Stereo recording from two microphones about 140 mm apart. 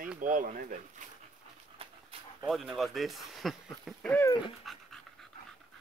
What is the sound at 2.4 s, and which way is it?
Speech, centre (ahead or behind).